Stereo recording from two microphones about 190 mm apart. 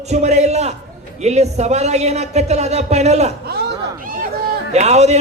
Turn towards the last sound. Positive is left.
turn(degrees=-35)  # may be behind; listen again after turning